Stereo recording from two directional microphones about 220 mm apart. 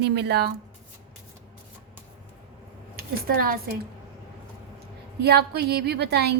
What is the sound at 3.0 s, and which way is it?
Speech, 45° right (ahead or behind).